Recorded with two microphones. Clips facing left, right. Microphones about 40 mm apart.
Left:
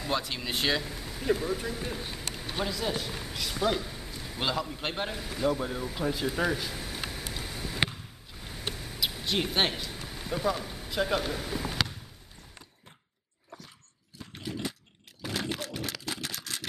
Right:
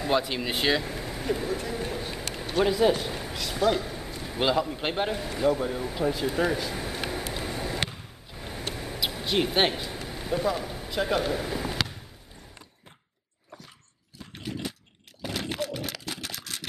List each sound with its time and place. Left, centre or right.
0.0 s speech: centre
0.8 s vehicle: right
1.3 s speech: centre
2.6 s a man's voice: right
2.9 s a man's voice: centre
3.3 s speech: centre
3.8 s a man's voice: centre
6.7 s a sound: right
7.2 s vehicle: centre
7.5 s a sound: right
8.4 s vehicle: right
8.7 s a sound: right
9.2 s speech: centre
15.2 s a sound: centre